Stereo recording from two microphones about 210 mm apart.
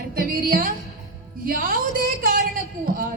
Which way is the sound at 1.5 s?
45° right (ahead or behind).